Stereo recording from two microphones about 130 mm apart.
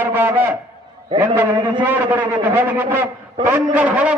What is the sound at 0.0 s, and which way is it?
A man's voice, 15° right (ahead or behind).